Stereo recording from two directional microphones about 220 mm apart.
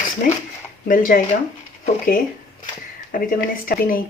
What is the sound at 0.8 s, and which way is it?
Speech, 40° left (ahead or behind).